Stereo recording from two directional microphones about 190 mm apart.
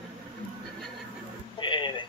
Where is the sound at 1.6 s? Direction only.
25° left (ahead or behind).